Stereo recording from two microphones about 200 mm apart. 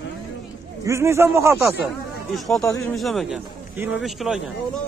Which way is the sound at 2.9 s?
Centre (ahead or behind).